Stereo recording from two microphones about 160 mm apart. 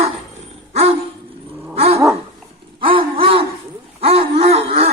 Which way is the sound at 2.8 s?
35° right (ahead or behind).